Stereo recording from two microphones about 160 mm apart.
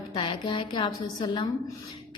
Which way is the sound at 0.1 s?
30° left (ahead or behind).